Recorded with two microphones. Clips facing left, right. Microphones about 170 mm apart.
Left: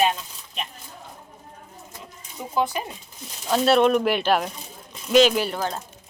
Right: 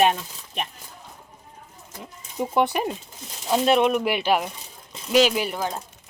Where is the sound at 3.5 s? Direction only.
15° right (ahead or behind).